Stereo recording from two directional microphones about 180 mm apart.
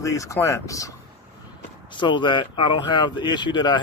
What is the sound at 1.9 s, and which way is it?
Speech, 25° left (ahead or behind).